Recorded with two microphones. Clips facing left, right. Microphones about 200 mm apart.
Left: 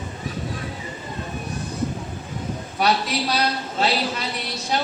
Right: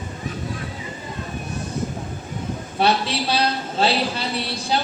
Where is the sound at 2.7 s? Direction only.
30° right (ahead or behind).